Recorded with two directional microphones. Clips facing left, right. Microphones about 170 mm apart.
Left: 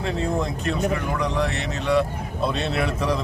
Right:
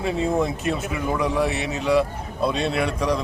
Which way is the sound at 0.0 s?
5° right (ahead or behind).